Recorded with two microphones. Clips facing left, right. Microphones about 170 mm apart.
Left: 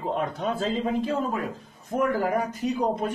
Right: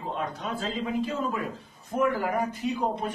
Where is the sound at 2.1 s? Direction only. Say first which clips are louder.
Left 3 dB; 40° left (ahead or behind).